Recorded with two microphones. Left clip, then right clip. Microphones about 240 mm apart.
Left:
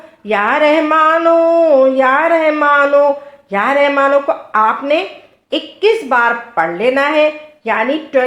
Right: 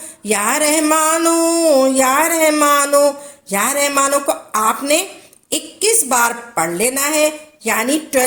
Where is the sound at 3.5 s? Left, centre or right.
Right.